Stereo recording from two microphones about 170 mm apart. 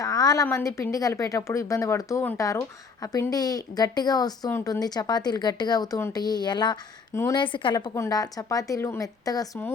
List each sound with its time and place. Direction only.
0.0 s a woman's voice: 20° left (ahead or behind)